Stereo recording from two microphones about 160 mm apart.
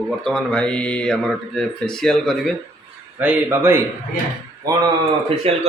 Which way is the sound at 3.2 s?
10° right (ahead or behind).